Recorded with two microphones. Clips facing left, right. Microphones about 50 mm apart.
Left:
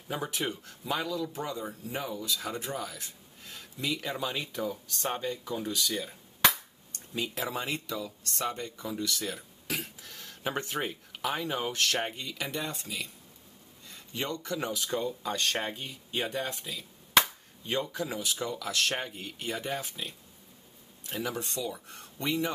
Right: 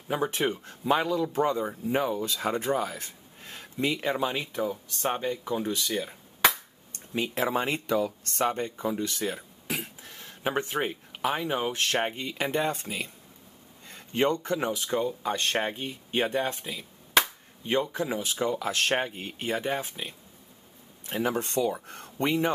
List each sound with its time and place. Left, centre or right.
0.1 s speech: right